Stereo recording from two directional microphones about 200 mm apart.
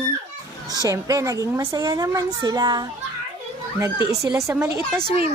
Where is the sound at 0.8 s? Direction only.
15° right (ahead or behind).